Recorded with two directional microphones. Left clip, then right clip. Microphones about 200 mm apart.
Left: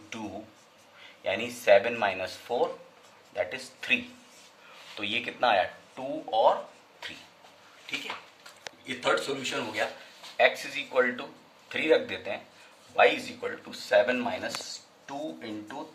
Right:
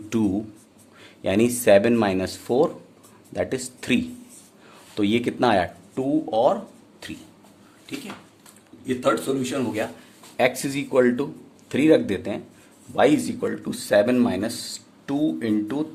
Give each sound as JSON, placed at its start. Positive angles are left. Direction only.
{"t": 1.2, "sound": "speech", "side_deg": -55}
{"t": 9.0, "sound": "speech", "side_deg": -55}